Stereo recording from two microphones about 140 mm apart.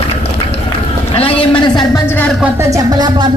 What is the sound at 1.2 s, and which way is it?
Speech, 40° left (ahead or behind).